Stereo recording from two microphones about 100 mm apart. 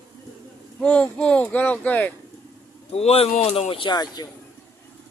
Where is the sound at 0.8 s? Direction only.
10° left (ahead or behind).